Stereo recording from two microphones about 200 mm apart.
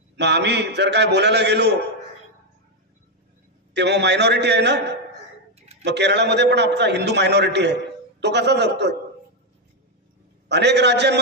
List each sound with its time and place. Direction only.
0.2 s a man's voice: 55° right (ahead or behind)
3.8 s a man's voice: 60° right (ahead or behind)
10.5 s a man's voice: 60° right (ahead or behind)